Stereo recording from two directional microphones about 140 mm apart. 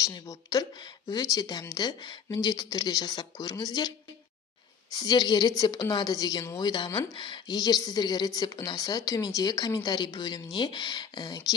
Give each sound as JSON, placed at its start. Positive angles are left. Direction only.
{"t": 0.0, "sound": "speech", "side_deg": 25}
{"t": 4.9, "sound": "speech", "side_deg": 30}